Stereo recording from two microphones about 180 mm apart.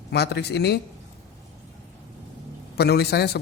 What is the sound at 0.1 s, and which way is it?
Speech, 65° left (ahead or behind).